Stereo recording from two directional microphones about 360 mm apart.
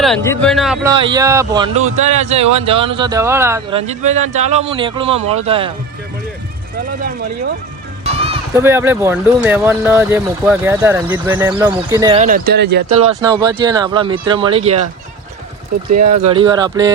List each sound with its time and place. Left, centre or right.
0.0 s speech: centre
0.9 s speech: centre
8.0 s speech: centre
12.9 s speech: centre
15.9 s speech: right
16.1 s speech: centre